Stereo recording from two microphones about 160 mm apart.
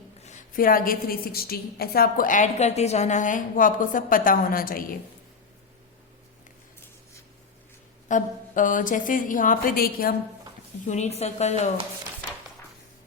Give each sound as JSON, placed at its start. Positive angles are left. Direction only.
{"t": 0.3, "sound": "a woman's voice", "side_deg": 60}
{"t": 8.0, "sound": "a woman's voice", "side_deg": 55}
{"t": 10.8, "sound": "speech", "side_deg": 45}